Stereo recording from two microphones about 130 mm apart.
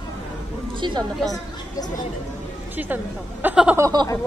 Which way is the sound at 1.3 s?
30° left (ahead or behind).